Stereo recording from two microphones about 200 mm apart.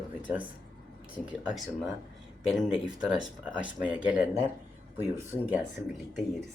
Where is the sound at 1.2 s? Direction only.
5° right (ahead or behind).